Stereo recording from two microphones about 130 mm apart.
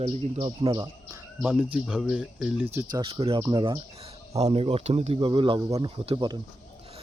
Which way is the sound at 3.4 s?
35° right (ahead or behind).